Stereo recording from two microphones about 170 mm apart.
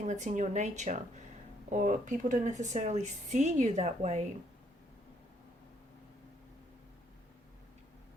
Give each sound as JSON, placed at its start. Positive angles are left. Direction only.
{"t": 0.0, "sound": "speech", "side_deg": -45}